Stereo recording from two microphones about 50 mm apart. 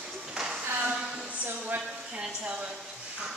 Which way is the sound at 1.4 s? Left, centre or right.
Right.